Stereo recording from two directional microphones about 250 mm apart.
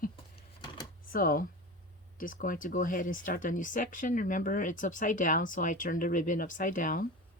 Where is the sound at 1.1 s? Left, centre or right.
Left.